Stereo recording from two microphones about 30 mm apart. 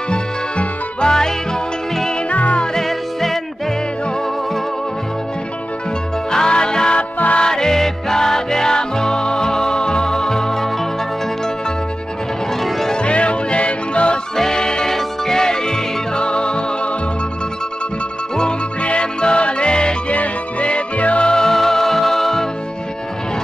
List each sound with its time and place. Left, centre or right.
0.1 s music: left
1.1 s music: left
2.2 s music: left
2.8 s music: centre
6.3 s music: left
12.9 s music: left
14.3 s music: centre
14.6 s music: left
14.9 s music: centre; by 16.9 s left
18.8 s music: left
20.1 s music: left
21.5 s music: centre